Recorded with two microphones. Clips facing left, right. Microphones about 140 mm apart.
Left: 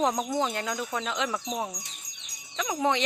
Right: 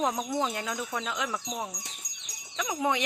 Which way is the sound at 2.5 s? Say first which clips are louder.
Left 2 dB; 5° right (ahead or behind).